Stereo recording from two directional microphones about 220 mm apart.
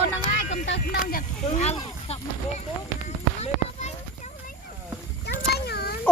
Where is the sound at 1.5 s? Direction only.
30° left (ahead or behind).